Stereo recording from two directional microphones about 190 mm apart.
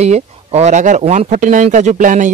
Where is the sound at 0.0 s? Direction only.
35° right (ahead or behind).